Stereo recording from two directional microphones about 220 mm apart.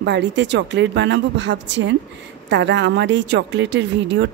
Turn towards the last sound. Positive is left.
turn(degrees=-55)  # may be behind; listen again after turning